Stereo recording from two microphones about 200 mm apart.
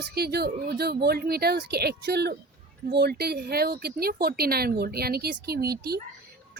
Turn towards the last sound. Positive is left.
turn(degrees=-50)  # may be behind; listen again after turning